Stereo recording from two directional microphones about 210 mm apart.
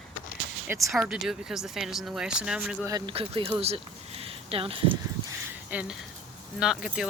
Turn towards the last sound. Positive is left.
turn(degrees=-5)  # may be behind; listen again after turning